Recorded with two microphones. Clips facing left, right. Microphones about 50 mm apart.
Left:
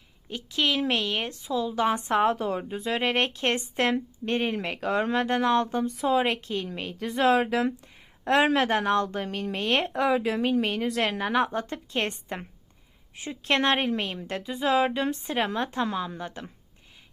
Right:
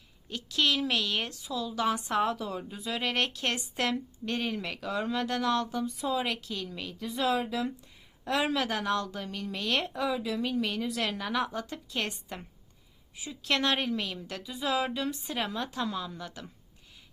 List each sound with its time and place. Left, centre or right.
0.3 s a woman's voice: left
5.8 s speech: left
9.9 s speech: left